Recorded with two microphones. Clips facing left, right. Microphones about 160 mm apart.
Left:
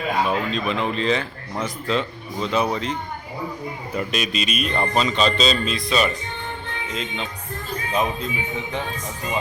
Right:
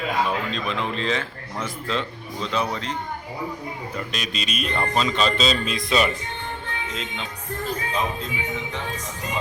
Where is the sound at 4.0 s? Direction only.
5° left (ahead or behind).